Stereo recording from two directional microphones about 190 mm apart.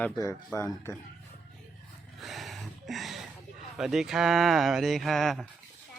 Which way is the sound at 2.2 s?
Centre (ahead or behind).